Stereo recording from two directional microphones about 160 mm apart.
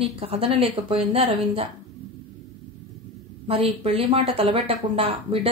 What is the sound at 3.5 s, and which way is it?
Speech, 35° right (ahead or behind).